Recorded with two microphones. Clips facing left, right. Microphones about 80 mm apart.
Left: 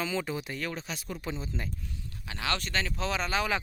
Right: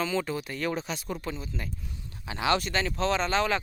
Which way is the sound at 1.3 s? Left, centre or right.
Left.